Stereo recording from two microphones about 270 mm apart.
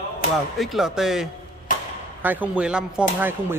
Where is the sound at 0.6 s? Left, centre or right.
Centre.